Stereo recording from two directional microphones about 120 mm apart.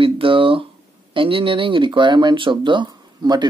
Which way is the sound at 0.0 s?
50° right (ahead or behind).